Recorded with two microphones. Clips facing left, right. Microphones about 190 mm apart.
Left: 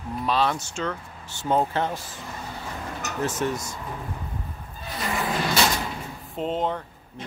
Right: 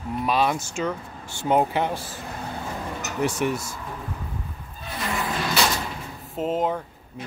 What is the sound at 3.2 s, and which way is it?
Speech, 10° right (ahead or behind).